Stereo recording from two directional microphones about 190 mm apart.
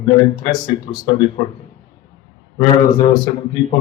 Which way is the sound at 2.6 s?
25° left (ahead or behind).